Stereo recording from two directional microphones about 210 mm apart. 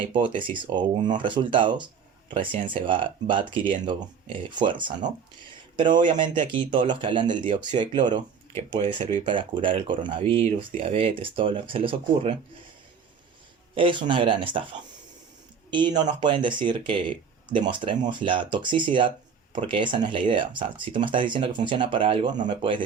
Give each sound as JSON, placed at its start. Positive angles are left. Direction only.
{"t": 0.1, "sound": "speech", "side_deg": -25}
{"t": 13.7, "sound": "speech", "side_deg": -25}